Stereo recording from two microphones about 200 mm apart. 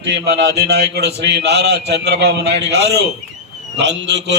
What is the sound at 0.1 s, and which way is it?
A man's voice, 60° right (ahead or behind).